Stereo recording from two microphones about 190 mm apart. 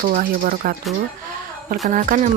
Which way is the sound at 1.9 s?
45° right (ahead or behind).